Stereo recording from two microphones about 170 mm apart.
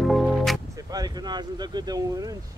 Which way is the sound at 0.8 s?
25° right (ahead or behind).